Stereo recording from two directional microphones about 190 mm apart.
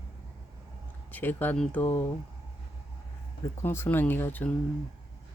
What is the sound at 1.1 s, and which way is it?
Speech, 10° left (ahead or behind).